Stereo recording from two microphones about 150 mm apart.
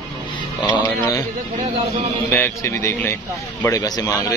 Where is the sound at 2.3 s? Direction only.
15° left (ahead or behind).